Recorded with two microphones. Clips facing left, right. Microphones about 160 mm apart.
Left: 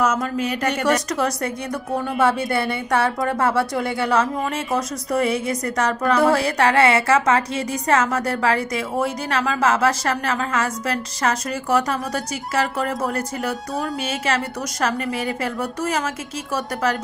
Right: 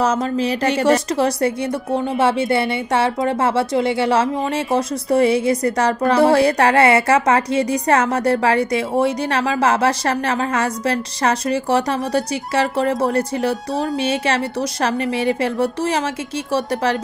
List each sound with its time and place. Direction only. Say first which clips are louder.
0.0 s a woman's voice: right 3 dB; 30° right (ahead or behind)